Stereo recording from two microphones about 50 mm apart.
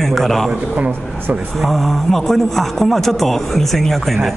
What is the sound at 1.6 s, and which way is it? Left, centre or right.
A man's voice, centre.